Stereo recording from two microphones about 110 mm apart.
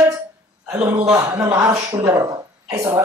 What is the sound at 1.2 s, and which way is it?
A woman's voice, 35° right (ahead or behind).